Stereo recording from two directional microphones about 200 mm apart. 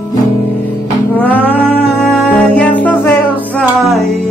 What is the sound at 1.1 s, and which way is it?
Music, 10° left (ahead or behind).